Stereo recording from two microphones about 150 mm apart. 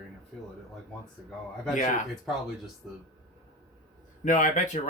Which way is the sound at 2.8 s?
5° right (ahead or behind).